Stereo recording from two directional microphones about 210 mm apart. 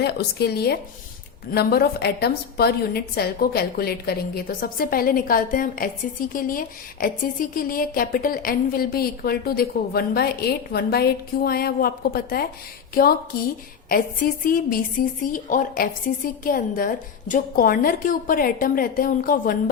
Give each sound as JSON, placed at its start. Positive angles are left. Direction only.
{"t": 0.0, "sound": "a woman's voice", "side_deg": 50}